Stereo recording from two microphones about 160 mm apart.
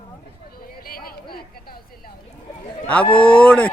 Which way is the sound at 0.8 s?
65° left (ahead or behind).